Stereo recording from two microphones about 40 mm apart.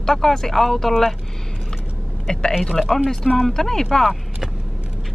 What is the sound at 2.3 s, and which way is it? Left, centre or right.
Speech, centre.